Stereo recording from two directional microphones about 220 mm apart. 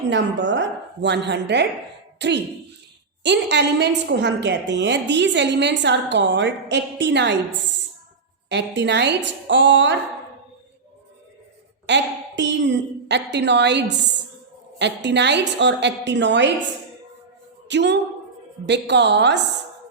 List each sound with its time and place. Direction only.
0.1 s a woman's voice: 55° right (ahead or behind)
11.9 s a woman's voice: 50° right (ahead or behind)
17.7 s a woman's voice: 50° right (ahead or behind)